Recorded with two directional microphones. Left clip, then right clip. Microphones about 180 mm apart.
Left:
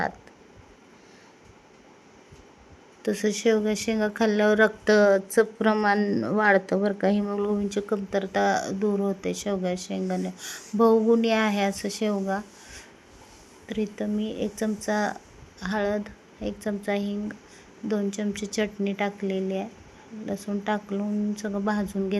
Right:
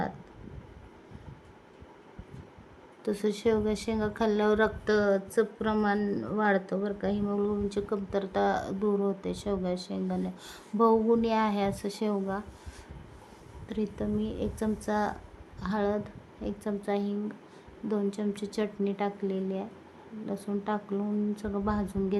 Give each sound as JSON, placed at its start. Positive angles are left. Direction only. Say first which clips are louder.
{"t": 3.0, "sound": "speech", "louder": "left 4 dB", "side_deg": 10}
{"t": 4.9, "sound": "speech", "louder": "left 7 dB", "side_deg": 20}
{"t": 7.7, "sound": "speech", "louder": "left 4 dB", "side_deg": 10}
{"t": 13.7, "sound": "a woman's voice", "louder": "left 3 dB", "side_deg": 5}
{"t": 18.2, "sound": "speech", "louder": "left 4 dB", "side_deg": 5}